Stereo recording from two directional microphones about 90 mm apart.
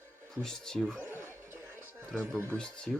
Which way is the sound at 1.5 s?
30° right (ahead or behind).